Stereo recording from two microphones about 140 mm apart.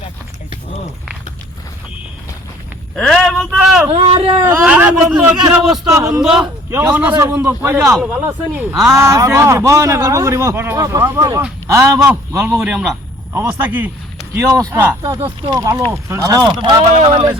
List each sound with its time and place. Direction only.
2.9 s speech: 5° left (ahead or behind)
3.9 s speech: 40° right (ahead or behind)
4.6 s a man's voice: 10° right (ahead or behind)
6.7 s a man's voice: 20° right (ahead or behind); by 17.3 s 40° right (ahead or behind)